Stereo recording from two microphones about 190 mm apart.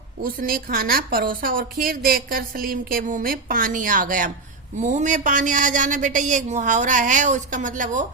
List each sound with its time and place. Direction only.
0.3 s a woman's voice: 50° right (ahead or behind)